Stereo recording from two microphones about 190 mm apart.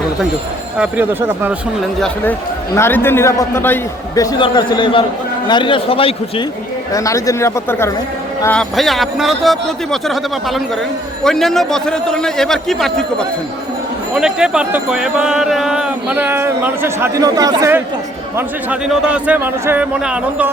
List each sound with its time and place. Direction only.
0.8 s a man's voice: 10° right (ahead or behind)
2.7 s a man's voice: 10° left (ahead or behind); by 6.4 s 30° left (ahead or behind)
6.9 s a man's voice: 15° left (ahead or behind)
8.4 s speech: 5° left (ahead or behind); by 17.7 s 20° right (ahead or behind)
18.3 s a man's voice: 5° right (ahead or behind)